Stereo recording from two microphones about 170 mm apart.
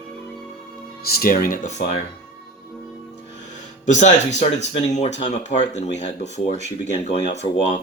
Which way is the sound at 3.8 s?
45° left (ahead or behind).